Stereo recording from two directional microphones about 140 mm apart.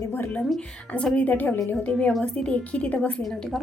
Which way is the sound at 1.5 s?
25° left (ahead or behind).